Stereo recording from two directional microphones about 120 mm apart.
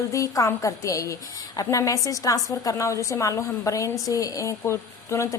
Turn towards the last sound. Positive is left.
turn(degrees=25)  # may be behind; listen again after turning